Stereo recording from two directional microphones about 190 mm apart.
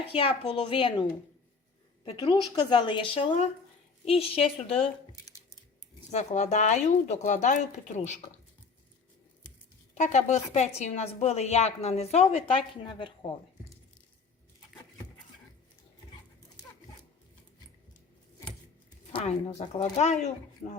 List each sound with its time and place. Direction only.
0.0 s a woman's voice: 30° left (ahead or behind)
2.0 s a woman's voice: 25° left (ahead or behind)
5.1 s a sound: 20° left (ahead or behind)
6.1 s a woman's voice: 40° left (ahead or behind)
9.9 s a woman's voice: 40° left (ahead or behind)
19.1 s a woman's voice: 30° left (ahead or behind)